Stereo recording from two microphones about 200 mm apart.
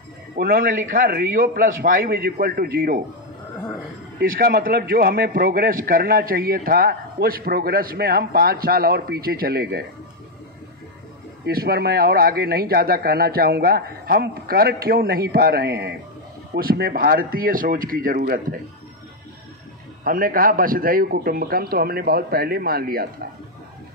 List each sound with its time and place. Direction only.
0.4 s a man's voice: 50° right (ahead or behind)
4.2 s a man's voice: 50° right (ahead or behind)
11.4 s a man's voice: 50° right (ahead or behind)
20.0 s a man's voice: 45° right (ahead or behind)